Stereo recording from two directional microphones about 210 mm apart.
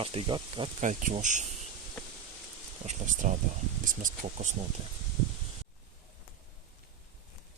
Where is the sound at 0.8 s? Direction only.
35° right (ahead or behind).